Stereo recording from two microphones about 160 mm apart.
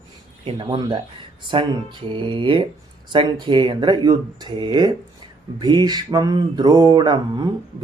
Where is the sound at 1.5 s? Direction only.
35° right (ahead or behind).